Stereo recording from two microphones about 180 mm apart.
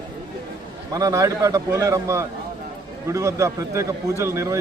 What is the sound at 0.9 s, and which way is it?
A man's voice, 20° right (ahead or behind).